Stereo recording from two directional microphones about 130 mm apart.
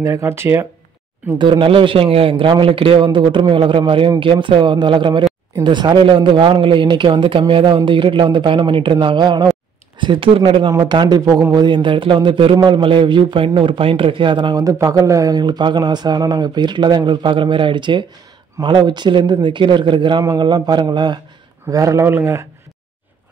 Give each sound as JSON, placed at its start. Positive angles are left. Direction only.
{"t": 0.0, "sound": "speech", "side_deg": -20}
{"t": 1.4, "sound": "a man's voice", "side_deg": -40}